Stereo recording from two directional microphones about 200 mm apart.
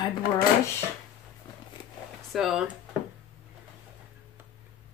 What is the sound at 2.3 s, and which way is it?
Speech, centre (ahead or behind).